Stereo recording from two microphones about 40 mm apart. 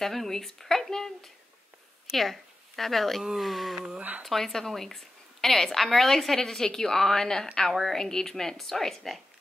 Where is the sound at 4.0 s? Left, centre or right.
Right.